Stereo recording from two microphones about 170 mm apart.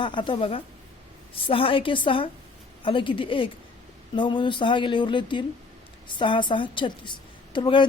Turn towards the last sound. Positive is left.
turn(degrees=30)  # may be behind; listen again after turning